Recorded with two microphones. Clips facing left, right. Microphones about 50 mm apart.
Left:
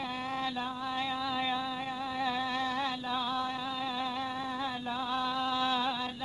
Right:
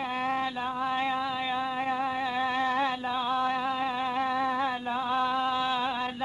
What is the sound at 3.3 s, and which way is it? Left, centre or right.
Music, right.